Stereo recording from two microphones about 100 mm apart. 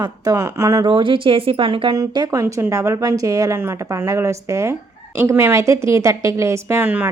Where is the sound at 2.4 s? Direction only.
30° right (ahead or behind).